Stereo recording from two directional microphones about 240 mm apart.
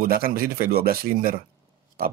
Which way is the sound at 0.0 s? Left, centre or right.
Right.